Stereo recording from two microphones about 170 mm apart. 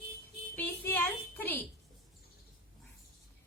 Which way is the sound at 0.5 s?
10° left (ahead or behind).